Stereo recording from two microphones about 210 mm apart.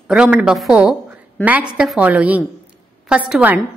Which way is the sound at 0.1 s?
5° right (ahead or behind).